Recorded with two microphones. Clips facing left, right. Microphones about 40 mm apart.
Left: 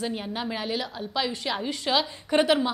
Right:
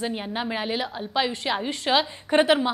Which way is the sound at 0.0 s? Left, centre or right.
Centre.